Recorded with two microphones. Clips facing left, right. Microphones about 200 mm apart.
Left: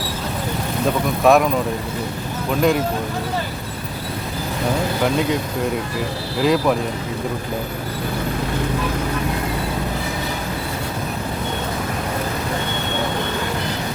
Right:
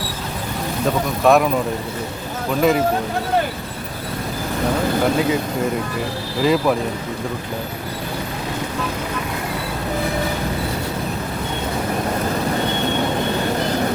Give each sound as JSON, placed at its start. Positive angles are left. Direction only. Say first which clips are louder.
{"t": 1.2, "sound": "speech", "louder": "even", "side_deg": 0}
{"t": 2.6, "sound": "speech", "louder": "right 1 dB", "side_deg": 0}
{"t": 6.4, "sound": "speech", "louder": "even", "side_deg": 0}